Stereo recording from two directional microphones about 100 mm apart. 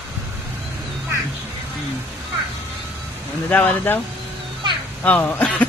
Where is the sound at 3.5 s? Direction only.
15° left (ahead or behind).